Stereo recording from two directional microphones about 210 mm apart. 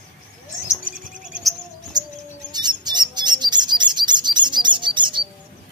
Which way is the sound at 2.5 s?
20° right (ahead or behind).